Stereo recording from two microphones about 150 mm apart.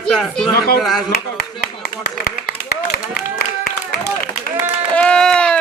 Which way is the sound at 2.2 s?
90° left.